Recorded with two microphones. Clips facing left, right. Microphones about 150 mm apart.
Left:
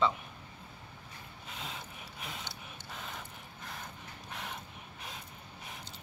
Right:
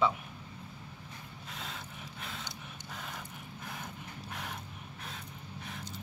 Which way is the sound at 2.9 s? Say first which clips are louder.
Even; centre (ahead or behind).